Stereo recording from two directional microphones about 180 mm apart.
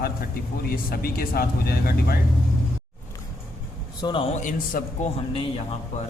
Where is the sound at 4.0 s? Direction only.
25° left (ahead or behind).